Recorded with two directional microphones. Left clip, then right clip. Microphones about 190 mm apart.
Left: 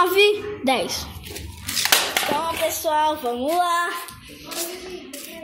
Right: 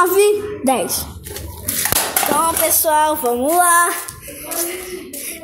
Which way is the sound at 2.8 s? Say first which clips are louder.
Right 6 dB; 5° right (ahead or behind).